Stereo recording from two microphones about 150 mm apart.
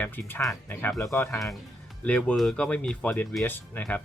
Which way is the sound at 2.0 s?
5° left (ahead or behind).